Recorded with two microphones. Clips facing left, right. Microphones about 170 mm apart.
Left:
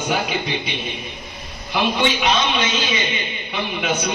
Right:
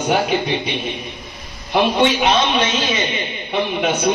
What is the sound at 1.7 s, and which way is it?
A man's voice, 55° right (ahead or behind).